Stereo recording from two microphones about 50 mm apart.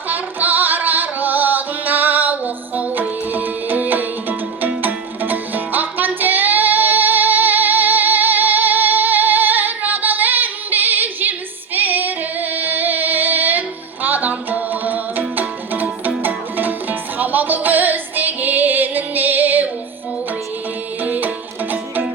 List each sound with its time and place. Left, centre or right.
0.1 s music: right
21.0 s music: right